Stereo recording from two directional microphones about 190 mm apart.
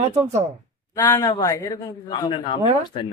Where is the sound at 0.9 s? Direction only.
15° left (ahead or behind).